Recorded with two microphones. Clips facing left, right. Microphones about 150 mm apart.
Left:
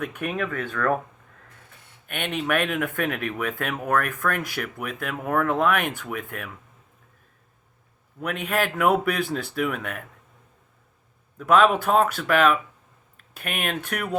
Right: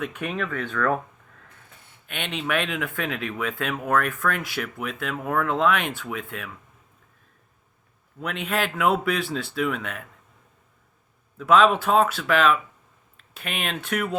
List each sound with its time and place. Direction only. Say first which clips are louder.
0.0 s speech: left 1 dB; 50° left (ahead or behind)
2.0 s speech: left 2 dB; 50° left (ahead or behind)
8.2 s speech: left 1 dB; 50° left (ahead or behind)
11.3 s speech: even; 45° left (ahead or behind)